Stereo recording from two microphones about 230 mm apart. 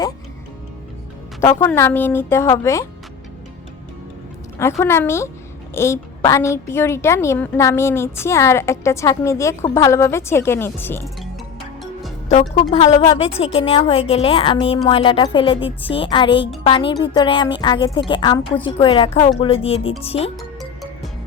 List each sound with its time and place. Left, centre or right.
1.4 s a woman's voice: centre
4.8 s a woman's voice: centre
12.3 s a woman's voice: left